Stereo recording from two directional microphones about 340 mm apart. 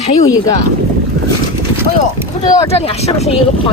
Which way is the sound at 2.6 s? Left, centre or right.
Centre.